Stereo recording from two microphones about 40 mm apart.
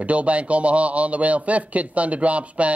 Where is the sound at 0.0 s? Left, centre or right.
Right.